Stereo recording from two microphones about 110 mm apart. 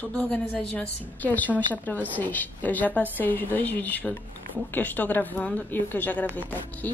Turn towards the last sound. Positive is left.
turn(degrees=15)  # may be behind; listen again after turning